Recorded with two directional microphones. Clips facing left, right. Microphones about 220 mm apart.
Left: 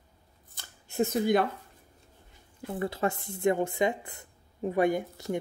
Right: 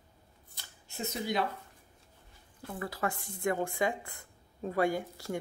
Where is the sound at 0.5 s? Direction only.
50° left (ahead or behind).